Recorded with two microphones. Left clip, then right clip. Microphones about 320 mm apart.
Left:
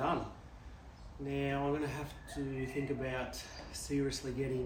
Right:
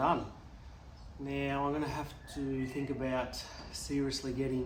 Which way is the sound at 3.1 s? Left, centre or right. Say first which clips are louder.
Right 4 dB; centre.